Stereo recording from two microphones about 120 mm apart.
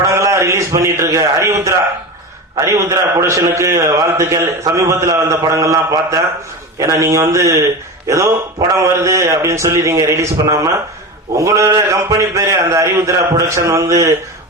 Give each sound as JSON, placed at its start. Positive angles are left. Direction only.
{"t": 0.0, "sound": "a man's voice", "side_deg": -25}